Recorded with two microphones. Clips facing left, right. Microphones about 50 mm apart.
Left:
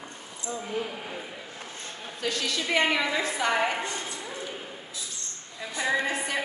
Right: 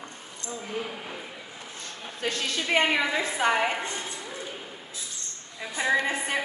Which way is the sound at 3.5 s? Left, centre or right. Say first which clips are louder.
Even; centre.